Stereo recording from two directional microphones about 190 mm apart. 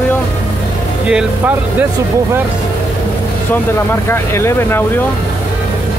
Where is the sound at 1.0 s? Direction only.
5° right (ahead or behind).